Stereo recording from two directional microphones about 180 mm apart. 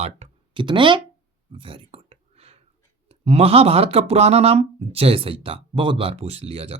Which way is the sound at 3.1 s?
35° right (ahead or behind).